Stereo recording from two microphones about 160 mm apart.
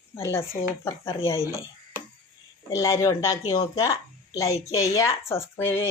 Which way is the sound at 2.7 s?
20° left (ahead or behind).